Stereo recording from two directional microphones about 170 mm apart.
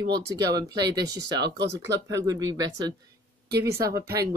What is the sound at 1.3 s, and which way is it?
Speech, 85° right.